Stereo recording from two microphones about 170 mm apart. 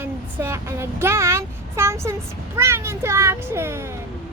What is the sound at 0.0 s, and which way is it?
Speech, 15° right (ahead or behind).